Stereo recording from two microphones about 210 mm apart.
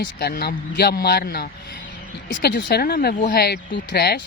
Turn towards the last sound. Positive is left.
turn(degrees=50)  # may be behind; listen again after turning